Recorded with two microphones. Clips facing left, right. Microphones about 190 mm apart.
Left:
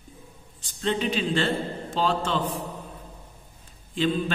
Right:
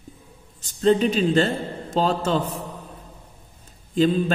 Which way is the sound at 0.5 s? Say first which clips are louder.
Right 9 dB; 40° right (ahead or behind).